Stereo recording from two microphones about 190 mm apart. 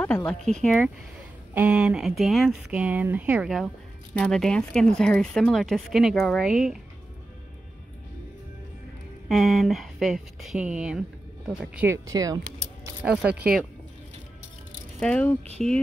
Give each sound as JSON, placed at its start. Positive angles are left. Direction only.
{"t": 0.0, "sound": "speech", "side_deg": 10}
{"t": 9.3, "sound": "speech", "side_deg": 0}
{"t": 13.0, "sound": "speech", "side_deg": -5}
{"t": 15.0, "sound": "speech", "side_deg": 5}